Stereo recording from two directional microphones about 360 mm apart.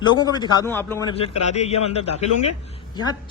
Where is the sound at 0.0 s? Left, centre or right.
Centre.